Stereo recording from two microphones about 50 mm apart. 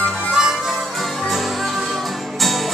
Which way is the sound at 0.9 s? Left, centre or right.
Centre.